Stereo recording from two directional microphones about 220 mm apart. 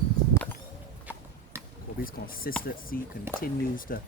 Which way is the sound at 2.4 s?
45° left (ahead or behind).